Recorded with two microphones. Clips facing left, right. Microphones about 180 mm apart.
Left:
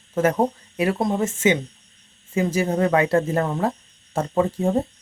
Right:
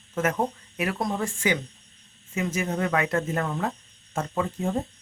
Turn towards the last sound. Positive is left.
turn(degrees=35)  # may be behind; listen again after turning